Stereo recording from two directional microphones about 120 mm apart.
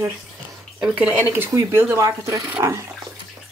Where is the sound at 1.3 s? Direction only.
20° right (ahead or behind).